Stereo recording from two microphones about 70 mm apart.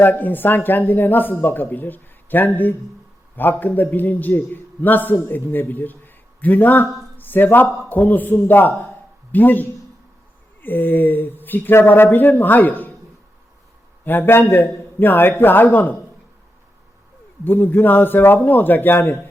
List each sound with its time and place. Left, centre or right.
0.0 s a man's voice: left
14.0 s a man's voice: left
17.4 s a man's voice: left